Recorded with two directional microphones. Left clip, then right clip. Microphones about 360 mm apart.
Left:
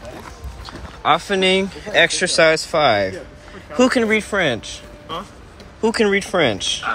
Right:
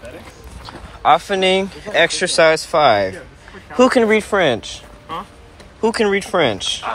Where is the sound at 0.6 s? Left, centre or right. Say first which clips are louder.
Right 3 dB; centre.